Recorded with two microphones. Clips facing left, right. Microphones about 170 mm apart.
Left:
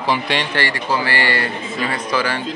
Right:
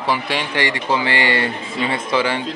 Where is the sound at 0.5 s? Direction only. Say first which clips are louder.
Right 1 dB; 20° right (ahead or behind).